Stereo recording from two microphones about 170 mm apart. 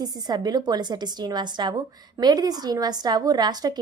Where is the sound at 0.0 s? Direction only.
25° right (ahead or behind).